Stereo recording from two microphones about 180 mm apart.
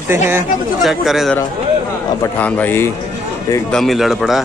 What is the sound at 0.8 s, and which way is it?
Speech, centre (ahead or behind).